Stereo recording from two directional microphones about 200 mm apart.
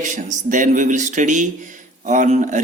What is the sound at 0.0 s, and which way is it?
Speech, 40° right (ahead or behind).